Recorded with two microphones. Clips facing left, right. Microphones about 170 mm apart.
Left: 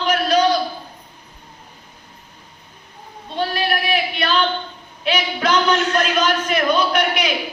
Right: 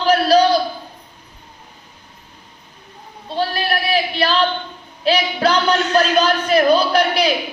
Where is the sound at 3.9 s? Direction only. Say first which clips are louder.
Right 2 dB; 35° right (ahead or behind).